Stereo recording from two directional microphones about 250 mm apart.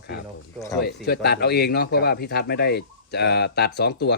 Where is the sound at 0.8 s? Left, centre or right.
Left.